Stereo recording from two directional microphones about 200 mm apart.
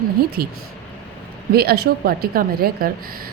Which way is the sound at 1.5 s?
50° right (ahead or behind).